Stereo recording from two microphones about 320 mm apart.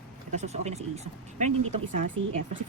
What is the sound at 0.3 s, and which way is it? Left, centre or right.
Speech, right.